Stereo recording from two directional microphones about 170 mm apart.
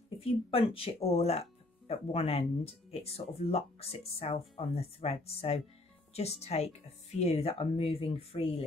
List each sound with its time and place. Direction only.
0.2 s speech: 35° left (ahead or behind)